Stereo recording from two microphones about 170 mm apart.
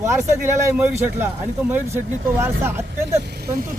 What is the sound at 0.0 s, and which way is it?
Speech, 15° right (ahead or behind).